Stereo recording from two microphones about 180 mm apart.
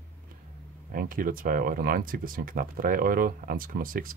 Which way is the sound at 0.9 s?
50° right (ahead or behind).